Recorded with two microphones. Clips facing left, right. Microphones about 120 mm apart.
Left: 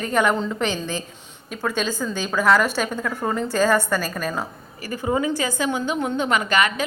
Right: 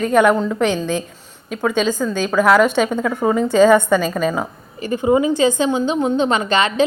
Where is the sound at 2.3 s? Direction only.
10° right (ahead or behind).